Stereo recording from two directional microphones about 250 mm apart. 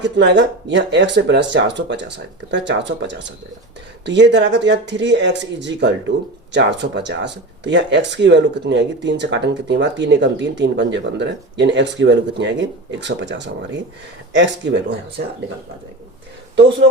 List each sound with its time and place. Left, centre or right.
0.0 s speech: right